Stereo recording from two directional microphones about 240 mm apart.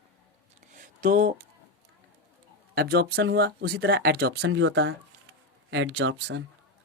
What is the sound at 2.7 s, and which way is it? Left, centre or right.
Speech, right.